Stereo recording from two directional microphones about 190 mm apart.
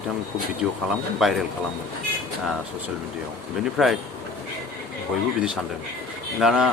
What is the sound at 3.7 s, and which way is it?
Speech, centre (ahead or behind).